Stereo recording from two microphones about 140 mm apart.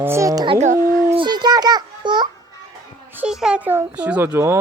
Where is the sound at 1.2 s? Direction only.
30° right (ahead or behind).